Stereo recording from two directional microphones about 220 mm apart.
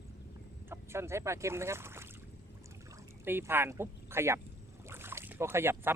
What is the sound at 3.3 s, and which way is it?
Speech, 10° right (ahead or behind).